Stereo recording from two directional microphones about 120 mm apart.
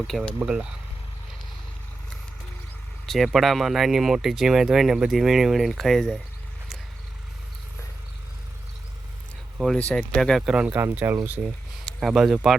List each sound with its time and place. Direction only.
0.1 s speech: centre (ahead or behind)
0.3 s speech: 10° right (ahead or behind)
3.1 s speech: centre (ahead or behind)
9.9 s speech: 5° left (ahead or behind)
10.7 s speech: 20° right (ahead or behind)
11.9 s speech: centre (ahead or behind)